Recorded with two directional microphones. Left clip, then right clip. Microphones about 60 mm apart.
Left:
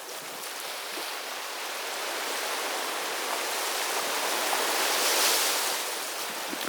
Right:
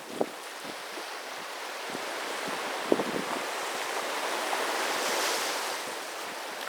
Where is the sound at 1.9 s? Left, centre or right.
Left.